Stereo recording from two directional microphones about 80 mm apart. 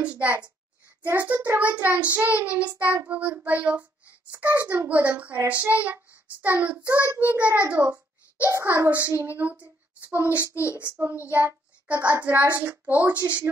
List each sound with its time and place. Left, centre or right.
0.0 s a child's voice: centre
1.0 s child singing: right
7.2 s a child's voice: right
8.6 s a child's voice: right
9.0 s child singing: right
10.5 s a child's voice: left
11.2 s child singing: right